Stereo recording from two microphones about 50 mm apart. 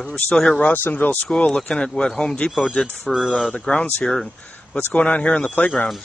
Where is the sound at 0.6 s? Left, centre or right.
Left.